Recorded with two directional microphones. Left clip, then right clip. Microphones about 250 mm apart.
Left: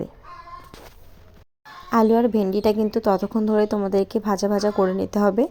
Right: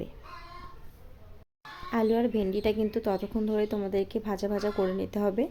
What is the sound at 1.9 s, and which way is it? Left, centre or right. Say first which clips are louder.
A woman's voice: left 9 dB; centre.